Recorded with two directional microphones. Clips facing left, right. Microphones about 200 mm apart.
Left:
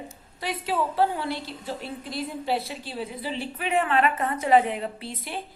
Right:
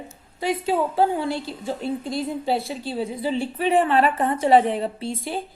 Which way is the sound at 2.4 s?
30° right (ahead or behind).